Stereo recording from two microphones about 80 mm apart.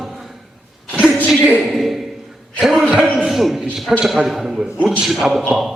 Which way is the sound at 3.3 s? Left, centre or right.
Centre.